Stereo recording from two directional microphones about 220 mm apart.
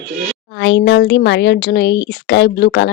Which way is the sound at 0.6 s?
55° left (ahead or behind).